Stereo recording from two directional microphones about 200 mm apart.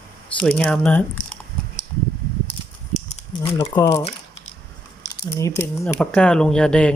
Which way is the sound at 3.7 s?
15° left (ahead or behind).